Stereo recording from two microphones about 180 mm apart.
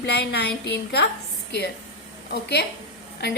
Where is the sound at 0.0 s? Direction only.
70° left (ahead or behind).